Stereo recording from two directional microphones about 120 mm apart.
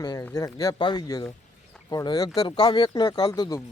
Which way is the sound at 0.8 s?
40° left (ahead or behind).